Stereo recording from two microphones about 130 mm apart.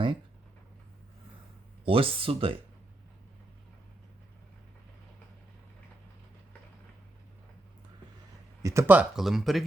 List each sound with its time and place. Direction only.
1.8 s speech: 45° right (ahead or behind)
8.6 s speech: 20° right (ahead or behind)
9.0 s speech: centre (ahead or behind)